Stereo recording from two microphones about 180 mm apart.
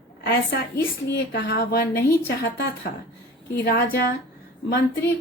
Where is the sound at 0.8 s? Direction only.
65° left (ahead or behind).